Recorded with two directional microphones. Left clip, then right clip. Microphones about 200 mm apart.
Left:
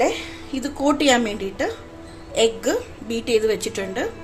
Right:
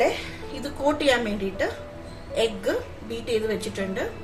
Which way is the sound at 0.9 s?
55° left (ahead or behind).